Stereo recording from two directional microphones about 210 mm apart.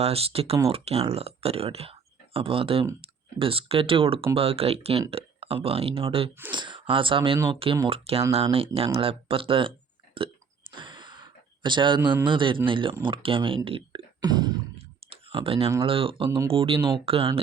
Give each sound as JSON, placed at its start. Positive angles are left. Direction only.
{"t": 0.0, "sound": "speech", "side_deg": -30}
{"t": 10.2, "sound": "burping", "side_deg": -25}
{"t": 10.8, "sound": "a sound", "side_deg": -20}
{"t": 12.2, "sound": "speech", "side_deg": -25}
{"t": 15.1, "sound": "clicking", "side_deg": -25}
{"t": 15.8, "sound": "speech", "side_deg": -25}